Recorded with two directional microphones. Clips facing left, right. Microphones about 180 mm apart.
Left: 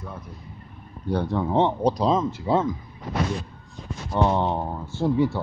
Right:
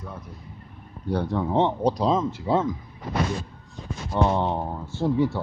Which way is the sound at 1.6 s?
35° left (ahead or behind).